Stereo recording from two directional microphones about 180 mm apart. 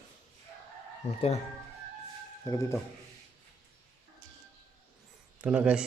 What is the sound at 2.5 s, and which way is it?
Speech, 15° left (ahead or behind).